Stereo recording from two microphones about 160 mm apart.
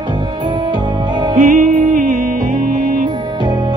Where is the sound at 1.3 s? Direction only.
60° right (ahead or behind).